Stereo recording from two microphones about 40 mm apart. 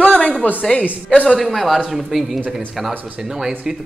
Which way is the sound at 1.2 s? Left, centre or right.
Centre.